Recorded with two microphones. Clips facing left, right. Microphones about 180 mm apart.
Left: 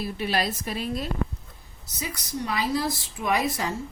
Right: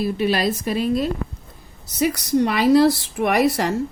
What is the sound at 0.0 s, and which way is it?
A woman's voice, 90° right.